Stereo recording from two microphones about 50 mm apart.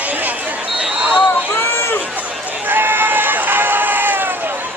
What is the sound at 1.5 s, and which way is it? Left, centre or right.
Run, left.